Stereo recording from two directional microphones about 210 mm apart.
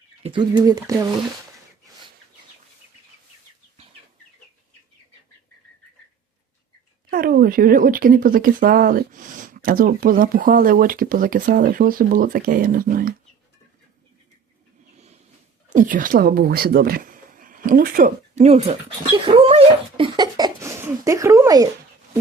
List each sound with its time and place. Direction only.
0.2 s speech: 25° right (ahead or behind)
7.1 s speech: 40° right (ahead or behind)
14.9 s a sound: 30° right (ahead or behind)
15.7 s speech: 40° right (ahead or behind); by 21.7 s 15° right (ahead or behind)